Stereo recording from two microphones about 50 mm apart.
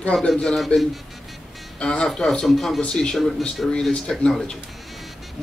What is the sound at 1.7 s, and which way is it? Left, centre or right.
A man's voice, centre.